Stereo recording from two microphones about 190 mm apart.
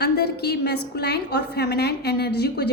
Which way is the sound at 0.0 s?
60° left (ahead or behind).